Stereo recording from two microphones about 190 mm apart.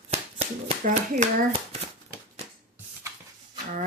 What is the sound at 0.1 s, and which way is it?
Shuffling cards, 30° right (ahead or behind).